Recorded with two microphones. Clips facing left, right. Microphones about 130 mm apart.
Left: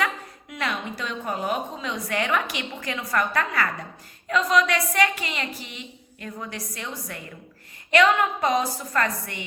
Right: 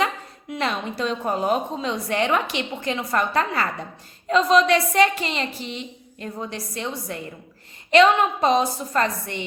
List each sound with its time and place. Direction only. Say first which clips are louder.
0.0 s a woman's voice: right 3 dB; 30° right (ahead or behind)